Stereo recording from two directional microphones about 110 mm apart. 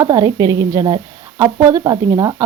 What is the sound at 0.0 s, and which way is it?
Speech, 30° right (ahead or behind).